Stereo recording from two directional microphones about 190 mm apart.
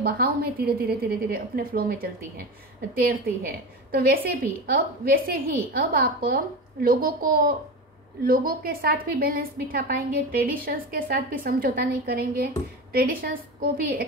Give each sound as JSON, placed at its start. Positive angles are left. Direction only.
{"t": 0.0, "sound": "a woman's voice", "side_deg": -55}
{"t": 3.9, "sound": "a woman's voice", "side_deg": -50}